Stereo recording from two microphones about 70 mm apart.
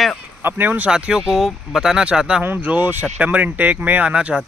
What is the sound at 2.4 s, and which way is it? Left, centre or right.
Speech, right.